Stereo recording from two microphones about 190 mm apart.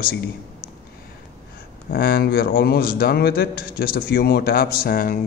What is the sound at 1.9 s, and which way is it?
A man's voice, 55° left (ahead or behind).